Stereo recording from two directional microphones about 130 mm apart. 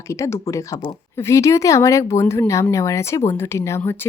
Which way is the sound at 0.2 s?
25° left (ahead or behind).